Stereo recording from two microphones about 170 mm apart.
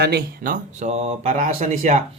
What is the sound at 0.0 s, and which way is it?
Speech, 70° right (ahead or behind).